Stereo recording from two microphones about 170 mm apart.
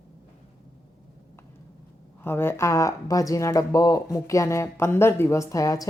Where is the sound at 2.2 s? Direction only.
15° left (ahead or behind).